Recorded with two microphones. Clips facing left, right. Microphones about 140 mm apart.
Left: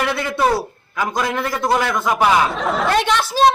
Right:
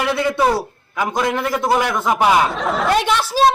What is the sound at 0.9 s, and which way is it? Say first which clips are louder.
Speech: right 2 dB; 20° right (ahead or behind).